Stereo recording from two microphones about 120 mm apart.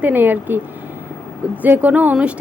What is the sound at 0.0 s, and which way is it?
Speech, 15° right (ahead or behind).